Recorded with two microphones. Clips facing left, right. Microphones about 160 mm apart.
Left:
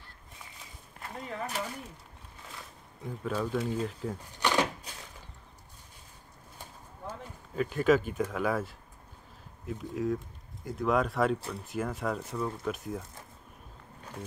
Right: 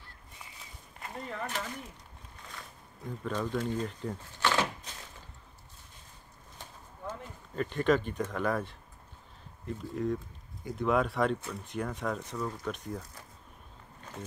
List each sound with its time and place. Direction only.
1.0 s speech: centre (ahead or behind)
3.1 s speech: 5° left (ahead or behind)
4.2 s a sound: 15° left (ahead or behind)
6.6 s a sound: 10° left (ahead or behind)
9.7 s speech: 5° left (ahead or behind)
11.3 s speech: 30° left (ahead or behind)
11.6 s speech: 5° left (ahead or behind)